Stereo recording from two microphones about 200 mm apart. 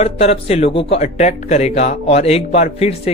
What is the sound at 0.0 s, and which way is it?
Speech, 30° left (ahead or behind).